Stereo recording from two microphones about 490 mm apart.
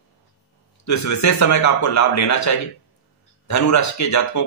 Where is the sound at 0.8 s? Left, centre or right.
Left.